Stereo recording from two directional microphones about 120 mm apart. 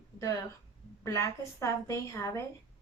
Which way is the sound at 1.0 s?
25° left (ahead or behind).